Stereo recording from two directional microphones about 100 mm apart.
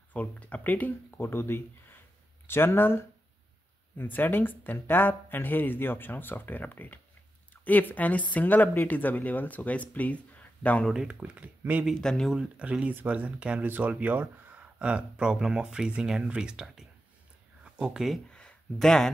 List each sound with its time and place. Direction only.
0.1 s speech: 15° left (ahead or behind)
10.9 s speech: 10° right (ahead or behind)
11.8 s speech: 5° left (ahead or behind)
12.4 s speech: 10° right (ahead or behind)
18.3 s a sound: 10° left (ahead or behind)